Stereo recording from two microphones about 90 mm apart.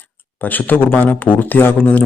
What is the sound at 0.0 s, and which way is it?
Speech, 20° left (ahead or behind).